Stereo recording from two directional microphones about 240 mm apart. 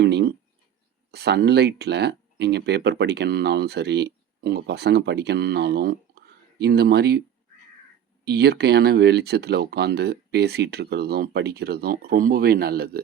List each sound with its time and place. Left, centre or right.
0.0 s a sound: right
1.1 s speech: right
8.2 s speech: right